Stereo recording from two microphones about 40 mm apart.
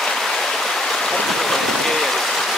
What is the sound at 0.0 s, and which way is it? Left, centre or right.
Stream, centre.